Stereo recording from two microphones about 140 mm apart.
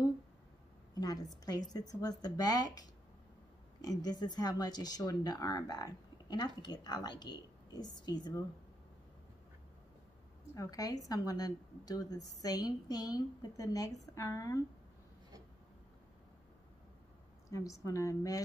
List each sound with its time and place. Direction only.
0.9 s speech: 30° left (ahead or behind)
10.5 s speech: 25° left (ahead or behind)
17.5 s speech: 25° left (ahead or behind)